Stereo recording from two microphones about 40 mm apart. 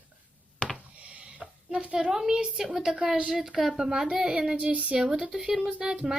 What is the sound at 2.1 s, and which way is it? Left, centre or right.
Speech, centre.